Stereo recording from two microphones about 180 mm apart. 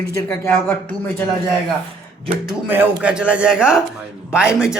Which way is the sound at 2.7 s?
10° right (ahead or behind).